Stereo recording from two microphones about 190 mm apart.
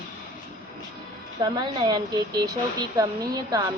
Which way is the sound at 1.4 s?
20° right (ahead or behind).